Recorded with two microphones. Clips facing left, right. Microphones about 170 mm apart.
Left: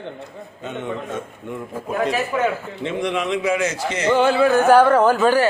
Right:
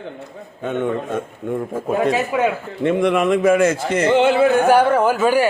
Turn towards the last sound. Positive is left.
turn(degrees=-10)  # may be behind; listen again after turning